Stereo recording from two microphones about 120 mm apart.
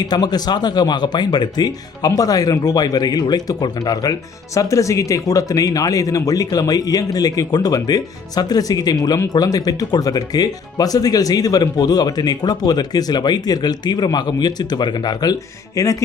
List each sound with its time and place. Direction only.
0.0 s speech: 35° left (ahead or behind)